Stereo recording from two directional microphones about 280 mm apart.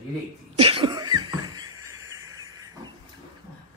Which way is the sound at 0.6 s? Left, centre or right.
Centre.